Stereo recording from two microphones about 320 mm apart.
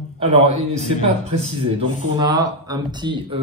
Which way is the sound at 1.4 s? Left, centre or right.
Centre.